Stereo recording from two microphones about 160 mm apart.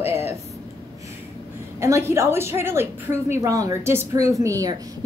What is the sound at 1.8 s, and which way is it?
A woman's voice, 15° right (ahead or behind).